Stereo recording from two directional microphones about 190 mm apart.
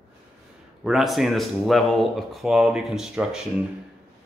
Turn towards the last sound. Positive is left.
turn(degrees=-5)  # may be behind; listen again after turning